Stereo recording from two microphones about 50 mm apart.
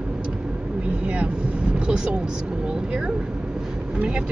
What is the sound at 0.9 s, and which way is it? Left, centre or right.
Vehicle, right.